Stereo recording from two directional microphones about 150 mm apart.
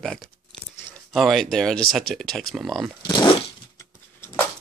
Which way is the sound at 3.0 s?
30° left (ahead or behind).